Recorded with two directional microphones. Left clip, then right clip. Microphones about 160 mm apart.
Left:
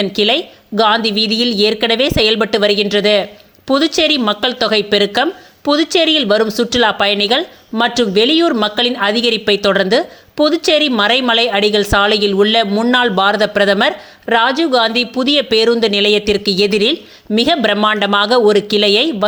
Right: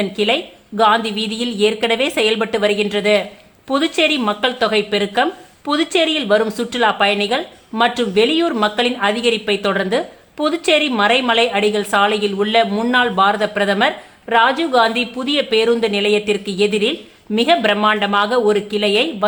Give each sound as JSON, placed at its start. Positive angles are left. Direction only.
{"t": 0.0, "sound": "a woman's voice", "side_deg": 35}